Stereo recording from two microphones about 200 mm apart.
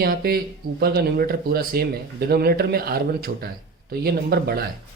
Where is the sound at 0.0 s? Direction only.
50° right (ahead or behind).